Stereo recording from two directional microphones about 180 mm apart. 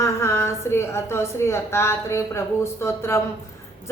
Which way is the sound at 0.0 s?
15° left (ahead or behind).